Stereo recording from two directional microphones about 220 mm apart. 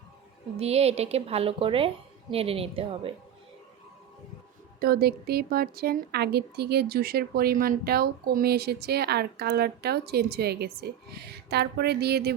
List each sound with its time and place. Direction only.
0.5 s a woman's voice: 30° right (ahead or behind)
4.8 s a woman's voice: 45° right (ahead or behind)